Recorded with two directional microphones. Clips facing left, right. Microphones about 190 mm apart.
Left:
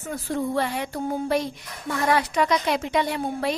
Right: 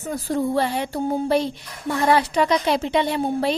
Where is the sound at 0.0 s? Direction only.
35° right (ahead or behind).